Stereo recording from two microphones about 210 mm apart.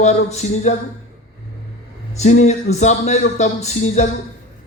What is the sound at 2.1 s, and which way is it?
A man's voice, 35° left (ahead or behind).